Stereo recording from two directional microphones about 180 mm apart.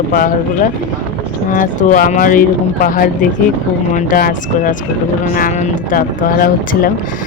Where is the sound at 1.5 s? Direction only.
45° left (ahead or behind).